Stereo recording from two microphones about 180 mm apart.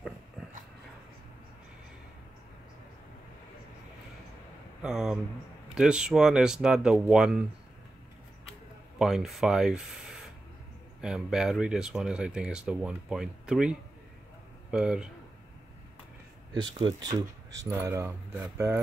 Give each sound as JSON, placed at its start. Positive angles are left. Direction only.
{"t": 4.8, "sound": "speech", "side_deg": -5}
{"t": 8.9, "sound": "speech", "side_deg": 0}
{"t": 16.7, "sound": "speech", "side_deg": -20}